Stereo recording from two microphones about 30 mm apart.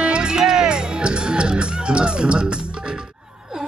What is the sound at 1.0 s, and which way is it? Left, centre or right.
Speech, right.